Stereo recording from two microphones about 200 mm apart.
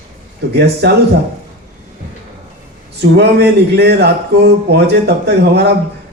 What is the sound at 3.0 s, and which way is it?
Speech, 55° right (ahead or behind).